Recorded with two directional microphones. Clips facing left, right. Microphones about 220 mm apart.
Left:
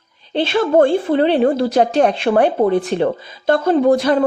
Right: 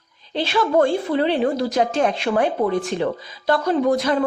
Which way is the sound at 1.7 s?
35° left (ahead or behind).